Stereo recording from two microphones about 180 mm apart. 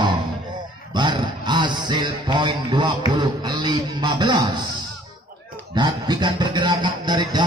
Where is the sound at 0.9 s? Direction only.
25° right (ahead or behind).